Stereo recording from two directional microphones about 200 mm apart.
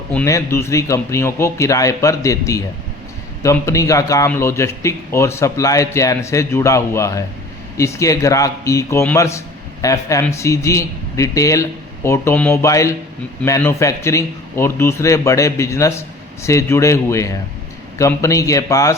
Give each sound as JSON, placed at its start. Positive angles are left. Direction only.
{"t": 0.1, "sound": "a man's voice", "side_deg": 10}